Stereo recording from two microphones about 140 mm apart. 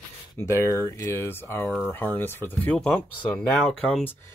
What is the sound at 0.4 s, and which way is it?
Speech, 20° left (ahead or behind).